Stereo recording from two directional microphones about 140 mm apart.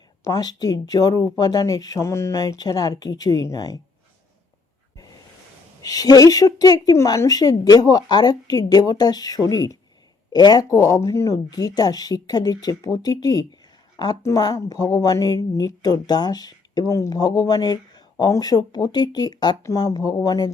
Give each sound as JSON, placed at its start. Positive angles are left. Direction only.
{"t": 0.3, "sound": "a woman's voice", "side_deg": 30}
{"t": 5.8, "sound": "a woman's voice", "side_deg": 25}